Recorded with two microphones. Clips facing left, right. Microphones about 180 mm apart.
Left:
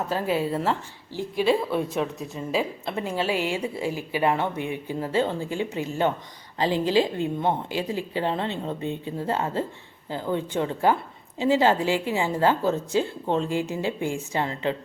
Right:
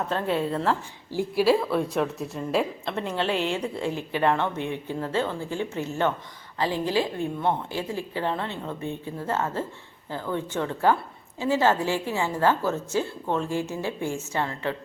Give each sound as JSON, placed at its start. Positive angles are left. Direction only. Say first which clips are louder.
{"t": 0.1, "sound": "a woman's voice", "louder": "left 2 dB", "side_deg": 5}